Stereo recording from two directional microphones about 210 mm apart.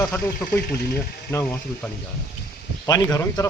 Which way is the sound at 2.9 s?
15° left (ahead or behind).